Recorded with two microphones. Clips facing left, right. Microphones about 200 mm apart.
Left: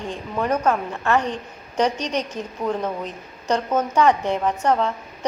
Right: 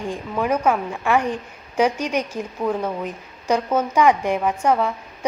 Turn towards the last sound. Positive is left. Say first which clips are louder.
# right 1 dB
turn(degrees=-10)  # may be behind; listen again after turning